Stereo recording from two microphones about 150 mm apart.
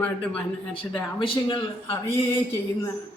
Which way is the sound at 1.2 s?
35° left (ahead or behind).